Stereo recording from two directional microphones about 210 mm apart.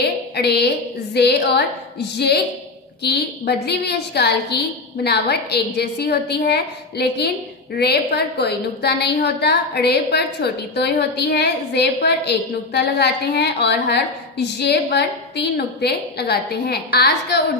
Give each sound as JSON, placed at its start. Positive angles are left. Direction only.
{"t": 0.4, "sound": "a woman's voice", "side_deg": 50}